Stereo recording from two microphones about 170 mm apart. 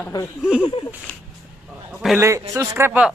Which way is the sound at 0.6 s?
30° left (ahead or behind).